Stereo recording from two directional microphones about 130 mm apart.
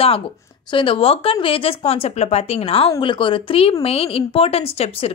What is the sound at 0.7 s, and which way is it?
A woman's voice, 45° left (ahead or behind).